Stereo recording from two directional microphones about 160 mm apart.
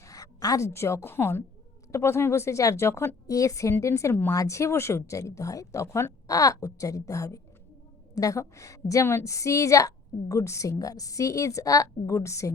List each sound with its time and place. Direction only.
0.0 s a woman's voice: 20° left (ahead or behind)